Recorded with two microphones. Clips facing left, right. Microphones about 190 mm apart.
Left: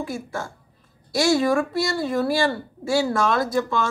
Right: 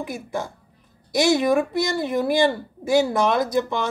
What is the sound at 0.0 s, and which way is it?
Speech, 15° right (ahead or behind).